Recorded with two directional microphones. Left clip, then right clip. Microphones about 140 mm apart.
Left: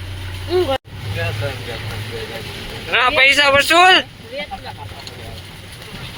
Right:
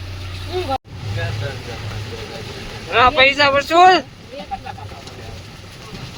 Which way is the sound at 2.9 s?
5° right (ahead or behind).